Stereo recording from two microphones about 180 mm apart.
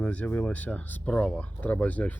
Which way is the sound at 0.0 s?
10° left (ahead or behind).